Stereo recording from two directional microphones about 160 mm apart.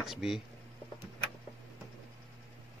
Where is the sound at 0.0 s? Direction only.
Centre (ahead or behind).